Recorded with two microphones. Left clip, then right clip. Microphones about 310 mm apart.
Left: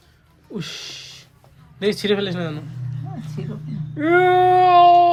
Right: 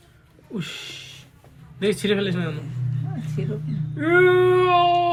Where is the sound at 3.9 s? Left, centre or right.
Left.